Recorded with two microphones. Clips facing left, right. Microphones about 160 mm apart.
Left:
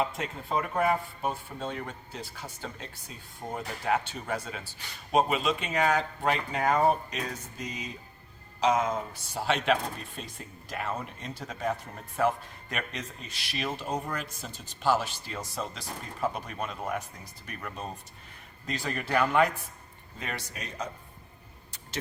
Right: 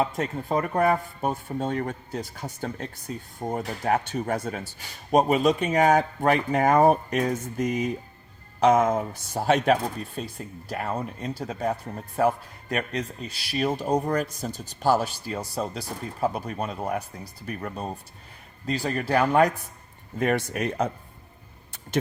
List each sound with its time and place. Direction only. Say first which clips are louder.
0.0 s speech: right 5 dB; 45° right (ahead or behind)
20.1 s speech: right 14 dB; 55° right (ahead or behind)